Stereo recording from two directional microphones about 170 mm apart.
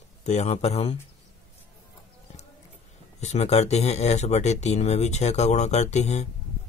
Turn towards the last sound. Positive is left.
turn(degrees=40)  # may be behind; listen again after turning